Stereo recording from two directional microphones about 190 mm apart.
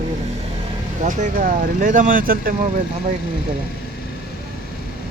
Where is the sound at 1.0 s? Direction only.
45° right (ahead or behind).